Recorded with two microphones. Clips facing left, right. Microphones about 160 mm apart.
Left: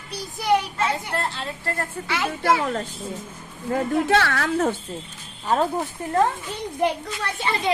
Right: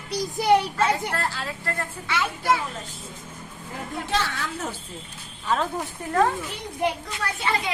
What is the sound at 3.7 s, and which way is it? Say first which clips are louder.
A woman's voice: left 9 dB; 70° left (ahead or behind).